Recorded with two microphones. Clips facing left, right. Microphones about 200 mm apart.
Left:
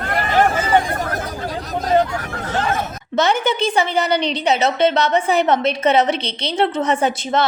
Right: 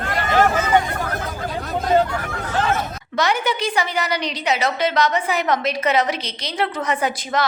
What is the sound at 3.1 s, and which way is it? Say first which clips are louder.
A woman's voice: left 3 dB; 25° left (ahead or behind).